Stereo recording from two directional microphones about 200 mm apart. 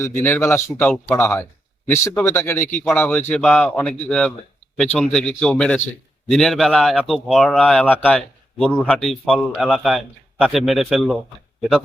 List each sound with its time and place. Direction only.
0.0 s a man's voice: 10° left (ahead or behind)